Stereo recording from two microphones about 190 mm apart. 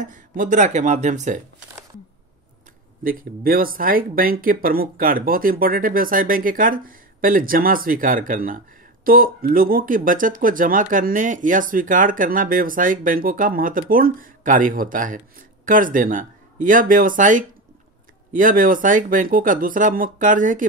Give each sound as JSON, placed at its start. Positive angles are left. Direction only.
{"t": 0.0, "sound": "speech", "side_deg": -45}
{"t": 3.0, "sound": "speech", "side_deg": -50}